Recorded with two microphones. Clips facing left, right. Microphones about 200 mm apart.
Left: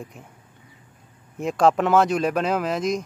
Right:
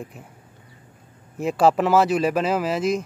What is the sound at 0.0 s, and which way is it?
Speech, 5° right (ahead or behind).